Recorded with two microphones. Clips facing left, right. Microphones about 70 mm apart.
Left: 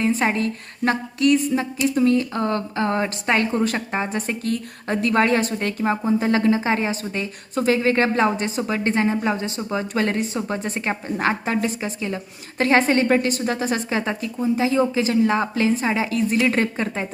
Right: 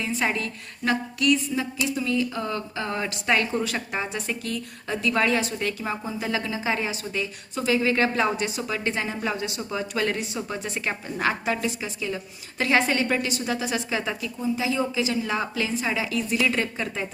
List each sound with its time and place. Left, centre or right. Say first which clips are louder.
0.0 s a woman's voice: left 6 dB; left
4.1 s a woman's voice: left 5 dB; left